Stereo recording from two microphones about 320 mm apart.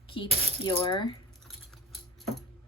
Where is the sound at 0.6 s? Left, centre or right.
Centre.